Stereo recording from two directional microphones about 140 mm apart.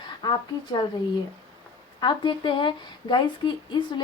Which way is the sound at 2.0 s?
35° left (ahead or behind).